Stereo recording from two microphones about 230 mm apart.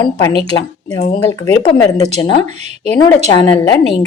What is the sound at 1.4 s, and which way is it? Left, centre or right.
Speech, centre.